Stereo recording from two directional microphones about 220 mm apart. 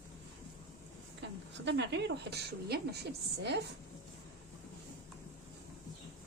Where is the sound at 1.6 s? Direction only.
50° right (ahead or behind).